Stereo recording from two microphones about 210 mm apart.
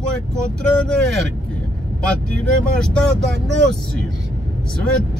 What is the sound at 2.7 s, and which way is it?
Speech, 5° left (ahead or behind).